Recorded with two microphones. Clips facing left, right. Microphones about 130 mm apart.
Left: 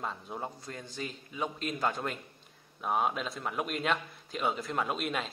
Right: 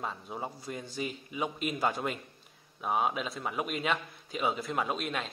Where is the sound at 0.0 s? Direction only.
Centre (ahead or behind).